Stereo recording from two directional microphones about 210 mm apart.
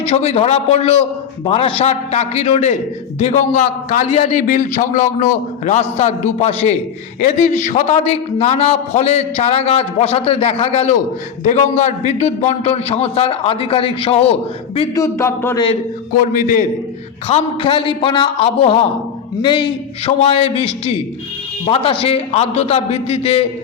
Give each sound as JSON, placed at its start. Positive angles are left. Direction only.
{"t": 0.1, "sound": "a man's voice", "side_deg": 30}
{"t": 14.8, "sound": "speech", "side_deg": 15}
{"t": 17.2, "sound": "a man's voice", "side_deg": 25}